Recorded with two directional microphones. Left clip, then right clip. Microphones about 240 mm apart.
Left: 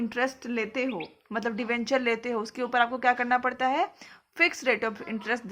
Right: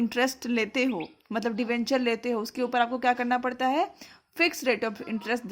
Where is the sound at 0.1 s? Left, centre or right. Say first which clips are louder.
Right 2 dB; right.